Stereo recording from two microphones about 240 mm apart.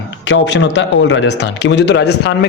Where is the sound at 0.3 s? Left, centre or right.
Left.